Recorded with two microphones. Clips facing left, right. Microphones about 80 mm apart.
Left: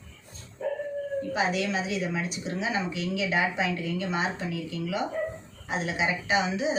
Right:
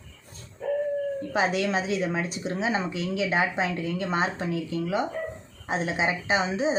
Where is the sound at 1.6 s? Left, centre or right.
Right.